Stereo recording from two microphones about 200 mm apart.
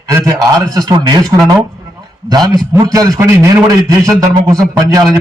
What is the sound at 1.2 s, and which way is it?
Speech, centre (ahead or behind).